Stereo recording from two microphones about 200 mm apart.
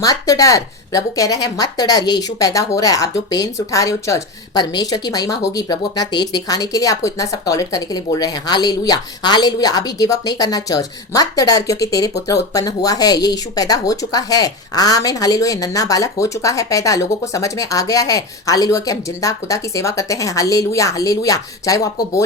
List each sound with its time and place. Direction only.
0.0 s speech: 15° left (ahead or behind)